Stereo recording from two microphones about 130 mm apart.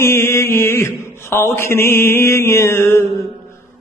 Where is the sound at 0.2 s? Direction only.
20° left (ahead or behind).